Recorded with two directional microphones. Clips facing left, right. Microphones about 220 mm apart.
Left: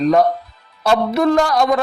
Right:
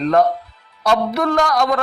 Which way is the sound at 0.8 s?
25° left (ahead or behind).